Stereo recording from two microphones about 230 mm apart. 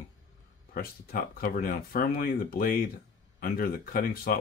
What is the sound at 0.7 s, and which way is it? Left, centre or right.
Speech, left.